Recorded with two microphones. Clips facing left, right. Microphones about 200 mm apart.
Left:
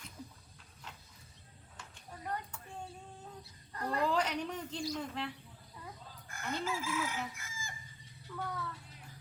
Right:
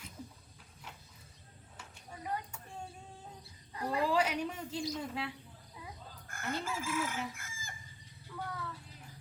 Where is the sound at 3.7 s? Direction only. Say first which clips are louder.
Right 1 dB; 10° right (ahead or behind).